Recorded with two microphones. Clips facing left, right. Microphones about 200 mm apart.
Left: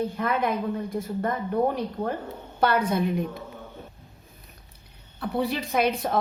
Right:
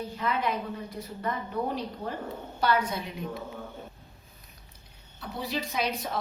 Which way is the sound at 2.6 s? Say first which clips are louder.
Left 5 dB; 55° left (ahead or behind).